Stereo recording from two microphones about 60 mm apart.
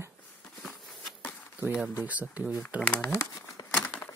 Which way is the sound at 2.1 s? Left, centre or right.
Right.